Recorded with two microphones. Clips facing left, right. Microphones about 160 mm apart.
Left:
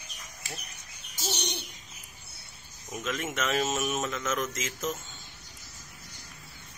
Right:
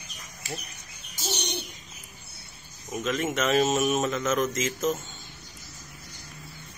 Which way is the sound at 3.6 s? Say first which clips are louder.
Right 6 dB; 30° right (ahead or behind).